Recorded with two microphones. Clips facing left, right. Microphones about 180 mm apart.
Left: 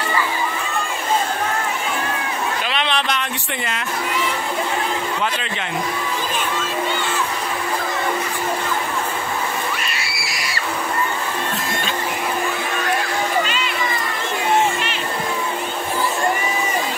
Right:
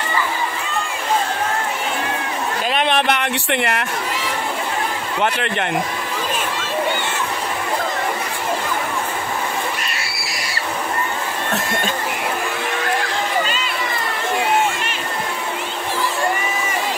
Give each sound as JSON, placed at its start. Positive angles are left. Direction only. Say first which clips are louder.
{"t": 2.7, "sound": "speech", "louder": "right 7 dB", "side_deg": -50}
{"t": 5.2, "sound": "speech", "louder": "right 4 dB", "side_deg": -60}